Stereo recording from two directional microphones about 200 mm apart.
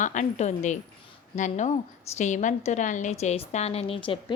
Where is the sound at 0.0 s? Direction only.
35° left (ahead or behind).